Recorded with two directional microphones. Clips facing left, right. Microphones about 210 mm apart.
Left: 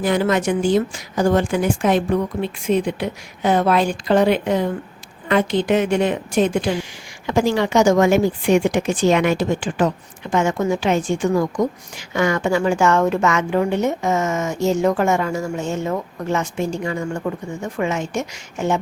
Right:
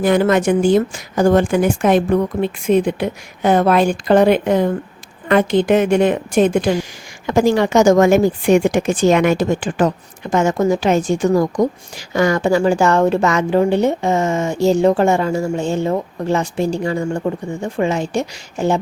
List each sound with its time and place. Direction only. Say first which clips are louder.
0.0 s a woman's voice: right 4 dB; 50° right (ahead or behind); by 18.8 s 35° right (ahead or behind)